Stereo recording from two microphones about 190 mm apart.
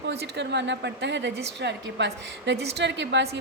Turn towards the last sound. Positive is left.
turn(degrees=-70)  # may be behind; listen again after turning